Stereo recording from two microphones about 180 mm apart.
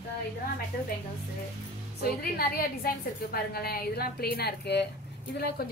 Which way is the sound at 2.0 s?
55° left (ahead or behind).